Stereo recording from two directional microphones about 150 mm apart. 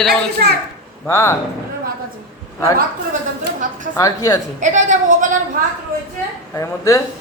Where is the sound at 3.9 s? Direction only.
20° left (ahead or behind).